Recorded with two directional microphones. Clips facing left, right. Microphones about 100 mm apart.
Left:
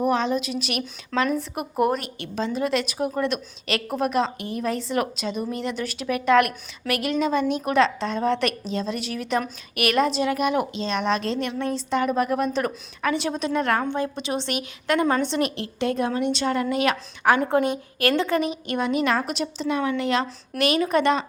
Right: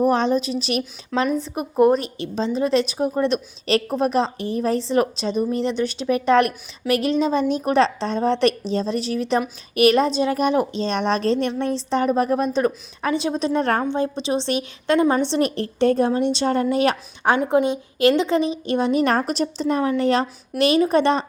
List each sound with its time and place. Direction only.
0.1 s a woman's voice: 35° right (ahead or behind)
15.5 s a woman's voice: 40° right (ahead or behind)
20.6 s a woman's voice: 25° right (ahead or behind)